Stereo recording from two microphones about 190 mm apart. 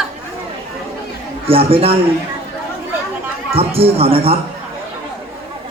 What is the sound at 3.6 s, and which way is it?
Speech, 30° right (ahead or behind).